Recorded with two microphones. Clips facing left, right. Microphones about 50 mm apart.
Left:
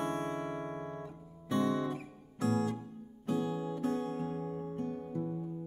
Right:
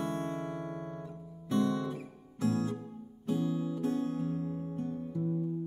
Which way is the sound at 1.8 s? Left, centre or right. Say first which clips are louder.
Left 1 dB; left.